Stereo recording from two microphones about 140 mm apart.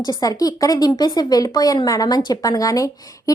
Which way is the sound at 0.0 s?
25° left (ahead or behind).